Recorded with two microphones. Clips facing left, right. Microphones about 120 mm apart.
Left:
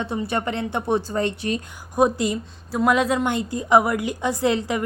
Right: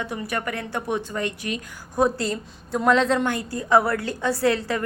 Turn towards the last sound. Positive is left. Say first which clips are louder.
# even
turn(degrees=15)  # may be behind; listen again after turning